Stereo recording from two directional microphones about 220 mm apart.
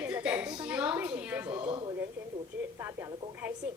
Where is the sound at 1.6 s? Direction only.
25° right (ahead or behind).